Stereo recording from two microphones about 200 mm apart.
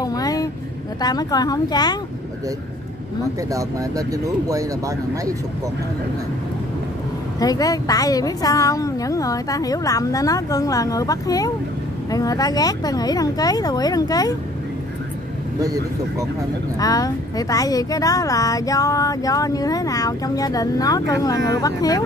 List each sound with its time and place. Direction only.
0.0 s vehicle: 20° left (ahead or behind)
1.0 s speech: 20° left (ahead or behind)
3.5 s speech: 15° right (ahead or behind)
7.3 s speech: 20° left (ahead or behind)
15.6 s speech: 15° right (ahead or behind)
16.7 s speech: 20° left (ahead or behind)